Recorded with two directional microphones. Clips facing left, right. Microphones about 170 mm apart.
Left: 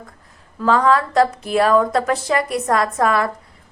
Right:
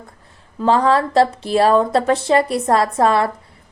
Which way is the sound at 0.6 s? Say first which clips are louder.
Right 1 dB; 30° right (ahead or behind).